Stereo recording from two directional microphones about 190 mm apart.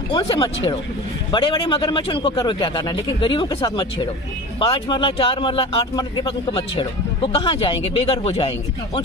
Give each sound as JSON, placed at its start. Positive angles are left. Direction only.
{"t": 0.1, "sound": "speech", "side_deg": 30}